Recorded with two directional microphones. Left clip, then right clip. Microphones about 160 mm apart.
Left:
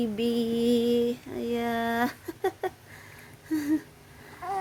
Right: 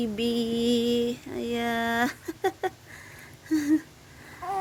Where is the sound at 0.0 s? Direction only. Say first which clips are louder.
Even; 5° left (ahead or behind).